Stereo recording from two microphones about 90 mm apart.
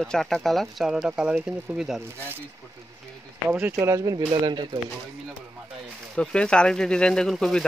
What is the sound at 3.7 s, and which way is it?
Speech, 40° right (ahead or behind).